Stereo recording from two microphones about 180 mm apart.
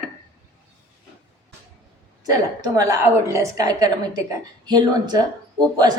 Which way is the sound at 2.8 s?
15° right (ahead or behind).